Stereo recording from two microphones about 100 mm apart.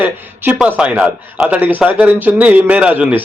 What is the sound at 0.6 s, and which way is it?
A man's voice, 10° right (ahead or behind).